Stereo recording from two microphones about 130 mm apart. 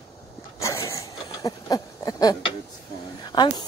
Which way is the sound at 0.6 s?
20° left (ahead or behind).